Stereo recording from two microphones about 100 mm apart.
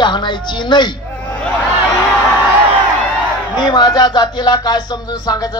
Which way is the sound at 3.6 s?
45° left (ahead or behind).